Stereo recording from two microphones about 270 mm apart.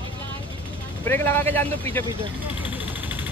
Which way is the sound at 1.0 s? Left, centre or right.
Centre.